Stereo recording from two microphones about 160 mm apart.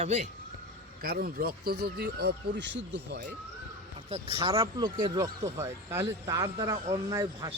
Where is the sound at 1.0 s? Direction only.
65° right (ahead or behind); by 3.2 s 90° right.